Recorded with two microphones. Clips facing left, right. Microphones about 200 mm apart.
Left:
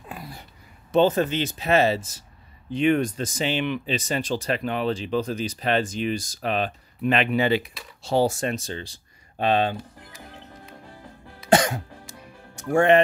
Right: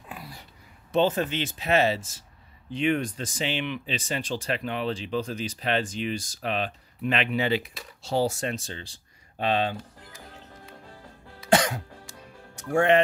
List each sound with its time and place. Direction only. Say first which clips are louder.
0.1 s a sound: left 3 dB; 50° left (ahead or behind)
0.9 s speech: left 4 dB; 40° left (ahead or behind)
11.4 s music: left 3 dB; 45° left (ahead or behind)
12.5 s speech: left 3 dB; 50° left (ahead or behind)